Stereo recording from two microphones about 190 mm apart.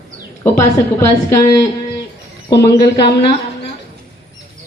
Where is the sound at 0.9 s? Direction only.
15° left (ahead or behind).